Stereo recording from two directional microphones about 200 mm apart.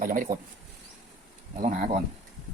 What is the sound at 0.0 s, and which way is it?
Speech, 40° right (ahead or behind).